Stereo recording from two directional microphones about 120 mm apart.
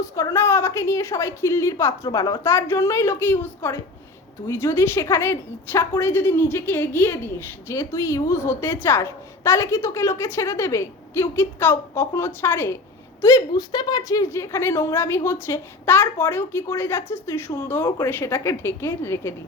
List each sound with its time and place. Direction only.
0.0 s a woman's voice: 25° left (ahead or behind)
2.0 s a woman's voice: 35° left (ahead or behind)
2.4 s a woman's voice: 20° left (ahead or behind)